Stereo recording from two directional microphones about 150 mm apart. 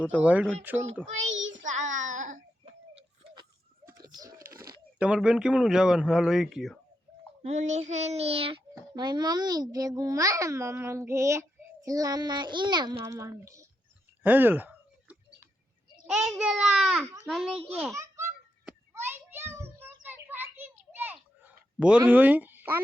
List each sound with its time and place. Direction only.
0.2 s speech: 10° right (ahead or behind)
1.5 s child singing: 55° right (ahead or behind)
3.9 s a sound: 25° right (ahead or behind)
4.9 s a man's voice: 5° right (ahead or behind)
7.4 s child singing: 50° right (ahead or behind)
8.7 s a child's voice: 30° right (ahead or behind)
14.3 s a sound: 10° right (ahead or behind)
16.0 s a man's voice: 5° right (ahead or behind)
17.9 s babbling: 20° right (ahead or behind)
18.6 s a sound: 15° right (ahead or behind)
21.8 s speech: 10° right (ahead or behind)